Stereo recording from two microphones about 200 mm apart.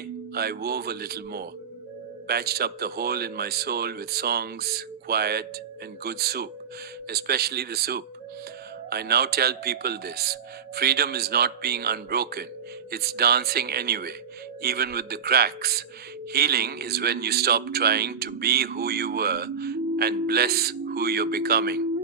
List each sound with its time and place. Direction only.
0.3 s speech: 50° right (ahead or behind)